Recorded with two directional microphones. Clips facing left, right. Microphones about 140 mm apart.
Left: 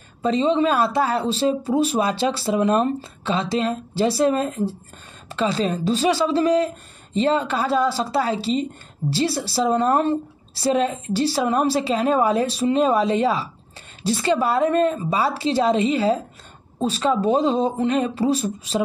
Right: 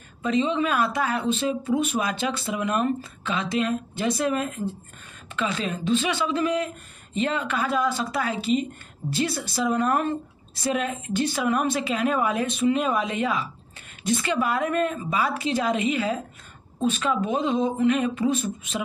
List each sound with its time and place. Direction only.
0.2 s speech: 35° left (ahead or behind)